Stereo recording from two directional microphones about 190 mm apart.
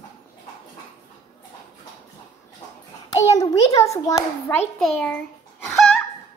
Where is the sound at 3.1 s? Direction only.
20° left (ahead or behind).